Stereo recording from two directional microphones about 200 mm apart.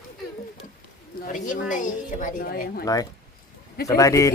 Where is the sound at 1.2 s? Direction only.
40° left (ahead or behind).